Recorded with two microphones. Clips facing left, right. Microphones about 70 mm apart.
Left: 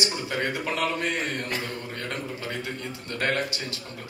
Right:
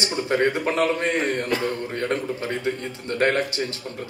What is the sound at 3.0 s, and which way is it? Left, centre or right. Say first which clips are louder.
Speech: right 7 dB; right.